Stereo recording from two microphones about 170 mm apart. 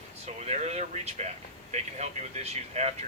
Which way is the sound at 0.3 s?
40° right (ahead or behind).